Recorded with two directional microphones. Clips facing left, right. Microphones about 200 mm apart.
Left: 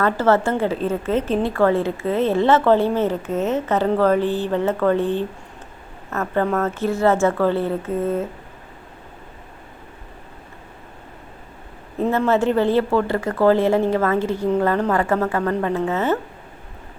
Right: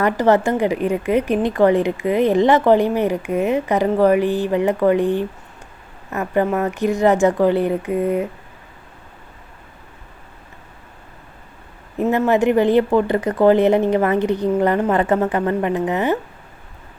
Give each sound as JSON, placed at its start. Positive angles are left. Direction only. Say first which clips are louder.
{"t": 0.0, "sound": "a woman's voice", "louder": "right 2 dB", "side_deg": -15}
{"t": 12.1, "sound": "a woman's voice", "louder": "right 3 dB", "side_deg": -15}